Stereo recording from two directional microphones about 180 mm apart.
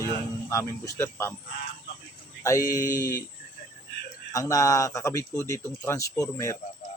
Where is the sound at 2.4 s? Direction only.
15° left (ahead or behind).